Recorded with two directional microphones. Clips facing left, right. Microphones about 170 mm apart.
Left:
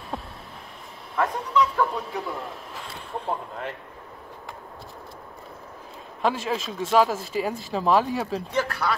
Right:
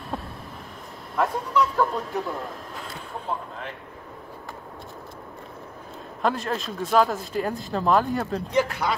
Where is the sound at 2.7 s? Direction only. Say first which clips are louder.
Left 1 dB; centre (ahead or behind).